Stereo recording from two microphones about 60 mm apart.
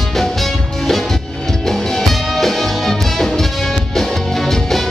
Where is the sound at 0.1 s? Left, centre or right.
Centre.